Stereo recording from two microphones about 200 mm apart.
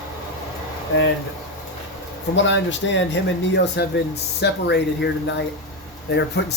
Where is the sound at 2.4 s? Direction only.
65° left (ahead or behind).